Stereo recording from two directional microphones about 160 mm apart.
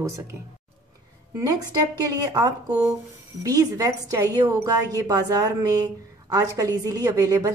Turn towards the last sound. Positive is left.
turn(degrees=-20)  # may be behind; listen again after turning